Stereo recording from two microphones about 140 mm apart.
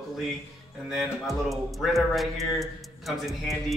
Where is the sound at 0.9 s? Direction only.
Centre (ahead or behind).